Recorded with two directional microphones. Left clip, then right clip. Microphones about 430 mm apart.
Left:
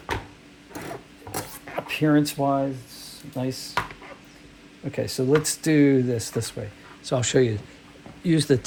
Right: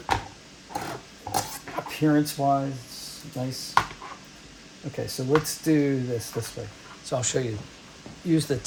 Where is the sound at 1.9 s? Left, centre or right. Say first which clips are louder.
Left 2 dB; centre.